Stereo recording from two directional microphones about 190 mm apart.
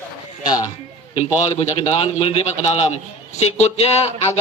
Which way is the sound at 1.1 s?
35° left (ahead or behind).